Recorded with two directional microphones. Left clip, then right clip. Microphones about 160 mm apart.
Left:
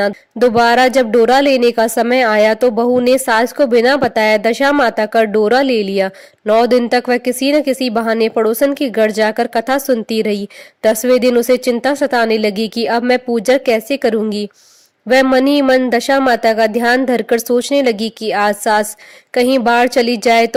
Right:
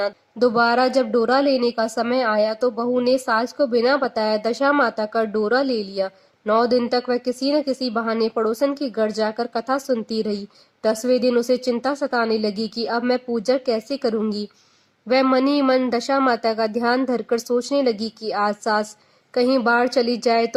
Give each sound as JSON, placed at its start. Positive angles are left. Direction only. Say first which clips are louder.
{"t": 0.0, "sound": "a woman's voice", "louder": "left 7 dB", "side_deg": 40}
{"t": 15.4, "sound": "speech", "louder": "left 7 dB", "side_deg": 10}
{"t": 15.9, "sound": "a woman's voice", "louder": "left 7 dB", "side_deg": 40}